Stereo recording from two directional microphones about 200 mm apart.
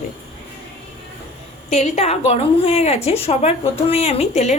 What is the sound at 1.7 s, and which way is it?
A woman's voice, 35° left (ahead or behind).